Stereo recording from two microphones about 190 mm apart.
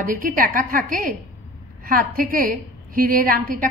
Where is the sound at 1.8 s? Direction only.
50° right (ahead or behind).